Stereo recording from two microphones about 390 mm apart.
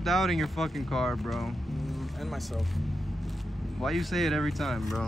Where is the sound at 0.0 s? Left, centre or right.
Centre.